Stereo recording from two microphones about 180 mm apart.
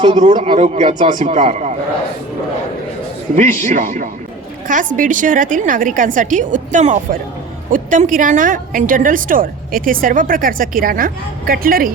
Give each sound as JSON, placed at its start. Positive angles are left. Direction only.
{"t": 0.2, "sound": "a man's voice", "side_deg": -40}
{"t": 3.3, "sound": "a woman's voice", "side_deg": -45}